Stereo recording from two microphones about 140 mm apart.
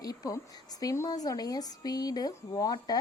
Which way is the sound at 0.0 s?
25° left (ahead or behind).